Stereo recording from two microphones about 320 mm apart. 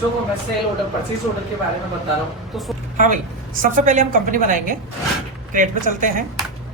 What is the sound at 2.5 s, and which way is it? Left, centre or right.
Speech, centre.